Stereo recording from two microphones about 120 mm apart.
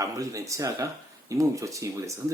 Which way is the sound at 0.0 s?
30° right (ahead or behind).